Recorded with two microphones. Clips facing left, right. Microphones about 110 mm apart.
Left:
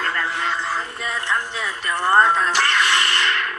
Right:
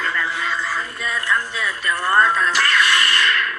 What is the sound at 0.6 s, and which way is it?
Speech, 25° left (ahead or behind).